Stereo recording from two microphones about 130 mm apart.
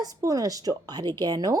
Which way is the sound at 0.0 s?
25° right (ahead or behind).